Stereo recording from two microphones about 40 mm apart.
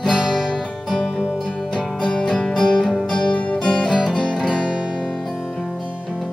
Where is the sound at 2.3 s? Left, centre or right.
Centre.